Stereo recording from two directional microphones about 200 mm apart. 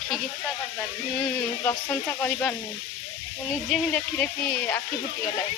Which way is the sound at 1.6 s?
10° left (ahead or behind).